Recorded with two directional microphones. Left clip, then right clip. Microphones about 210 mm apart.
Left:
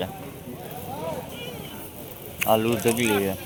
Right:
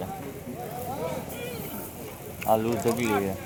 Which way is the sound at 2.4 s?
10° left (ahead or behind).